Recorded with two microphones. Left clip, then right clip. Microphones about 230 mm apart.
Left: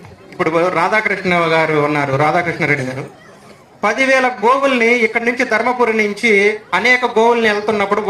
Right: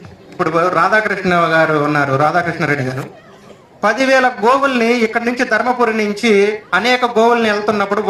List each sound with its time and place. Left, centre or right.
0.4 s a man's voice: right
3.8 s a man's voice: right